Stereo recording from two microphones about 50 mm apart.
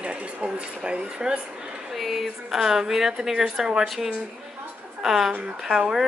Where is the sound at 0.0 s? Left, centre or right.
Right.